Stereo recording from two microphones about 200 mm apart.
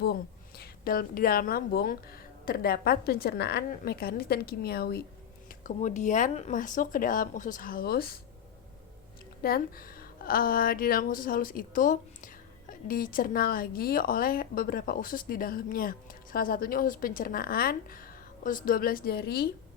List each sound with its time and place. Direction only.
0.0 s a woman's voice: 50° left (ahead or behind)
5.6 s speech: 40° left (ahead or behind)
9.4 s a woman's voice: 50° left (ahead or behind)